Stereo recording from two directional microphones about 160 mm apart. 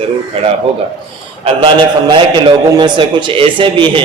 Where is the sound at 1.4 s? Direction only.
30° right (ahead or behind).